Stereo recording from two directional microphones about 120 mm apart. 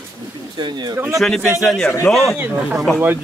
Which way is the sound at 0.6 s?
35° right (ahead or behind).